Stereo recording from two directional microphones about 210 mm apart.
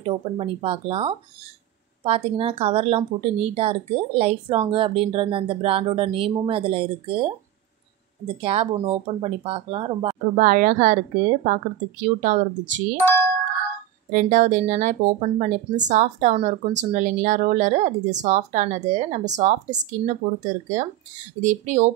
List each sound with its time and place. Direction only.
0.0 s speech: 25° right (ahead or behind)
8.4 s speech: 30° right (ahead or behind)
10.4 s speech: 40° right (ahead or behind)
14.1 s speech: 35° right (ahead or behind)